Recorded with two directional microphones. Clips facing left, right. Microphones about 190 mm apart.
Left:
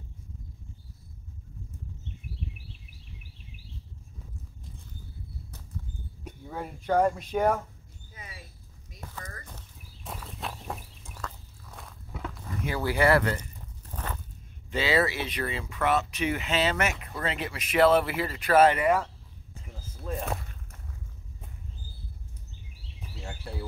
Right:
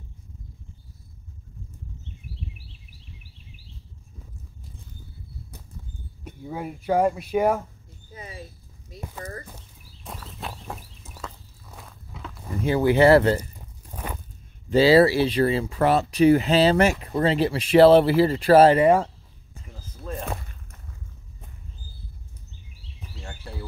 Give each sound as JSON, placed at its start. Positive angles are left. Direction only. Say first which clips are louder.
{"t": 6.4, "sound": "speech", "louder": "right 5 dB", "side_deg": -10}
{"t": 8.1, "sound": "mouse", "louder": "right 8 dB", "side_deg": -30}
{"t": 9.2, "sound": "horse", "louder": "right 11 dB", "side_deg": -25}
{"t": 10.0, "sound": "walk", "louder": "right 1 dB", "side_deg": 0}
{"t": 12.4, "sound": "speech", "louder": "right 10 dB", "side_deg": -25}
{"t": 13.4, "sound": "walk", "louder": "right 5 dB", "side_deg": -10}
{"t": 14.7, "sound": "speech", "louder": "right 10 dB", "side_deg": -35}
{"t": 20.0, "sound": "a sound", "louder": "right 1 dB", "side_deg": 0}